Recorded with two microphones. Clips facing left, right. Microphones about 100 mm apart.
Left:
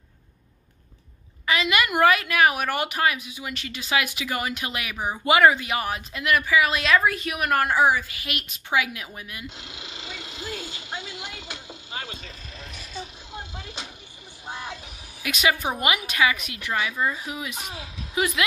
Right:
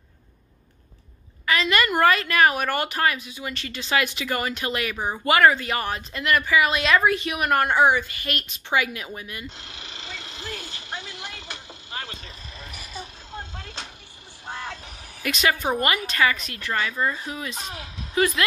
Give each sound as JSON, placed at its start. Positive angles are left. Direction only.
{"t": 1.4, "sound": "a woman's voice", "side_deg": 15}
{"t": 9.6, "sound": "a sound", "side_deg": 20}
{"t": 11.9, "sound": "vehicle", "side_deg": 20}
{"t": 12.5, "sound": "vehicle", "side_deg": 0}
{"t": 15.2, "sound": "a woman's voice", "side_deg": 5}